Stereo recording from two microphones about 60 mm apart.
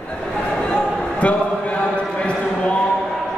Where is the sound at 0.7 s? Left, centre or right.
Left.